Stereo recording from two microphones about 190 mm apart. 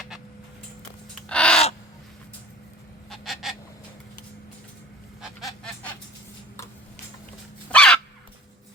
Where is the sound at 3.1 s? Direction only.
Centre (ahead or behind).